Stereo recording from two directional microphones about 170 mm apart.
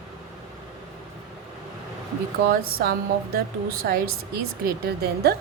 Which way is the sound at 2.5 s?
65° right (ahead or behind).